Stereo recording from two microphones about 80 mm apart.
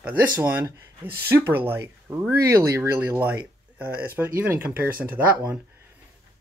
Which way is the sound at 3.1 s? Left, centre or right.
Right.